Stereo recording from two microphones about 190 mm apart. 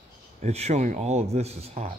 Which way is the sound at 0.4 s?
35° right (ahead or behind).